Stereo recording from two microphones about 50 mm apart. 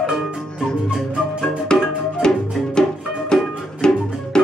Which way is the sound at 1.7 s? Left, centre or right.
Centre.